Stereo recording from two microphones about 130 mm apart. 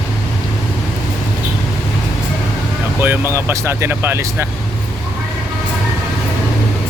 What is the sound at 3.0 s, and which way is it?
Speech, 15° right (ahead or behind).